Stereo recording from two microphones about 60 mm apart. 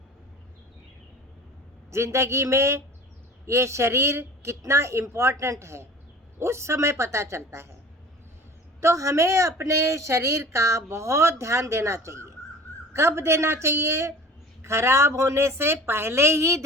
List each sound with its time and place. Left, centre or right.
1.9 s a woman's voice: right
8.8 s a woman's voice: right